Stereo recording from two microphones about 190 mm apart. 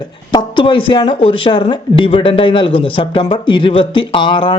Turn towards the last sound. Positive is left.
turn(degrees=25)  # may be behind; listen again after turning